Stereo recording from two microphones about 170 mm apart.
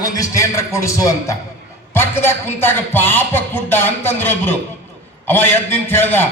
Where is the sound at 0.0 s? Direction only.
20° left (ahead or behind).